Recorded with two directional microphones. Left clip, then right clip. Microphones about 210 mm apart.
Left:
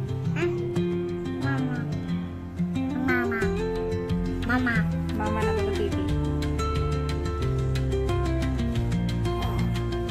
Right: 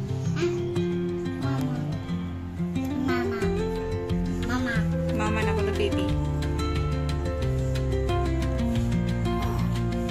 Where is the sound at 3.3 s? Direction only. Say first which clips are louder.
Left 1 dB; centre (ahead or behind).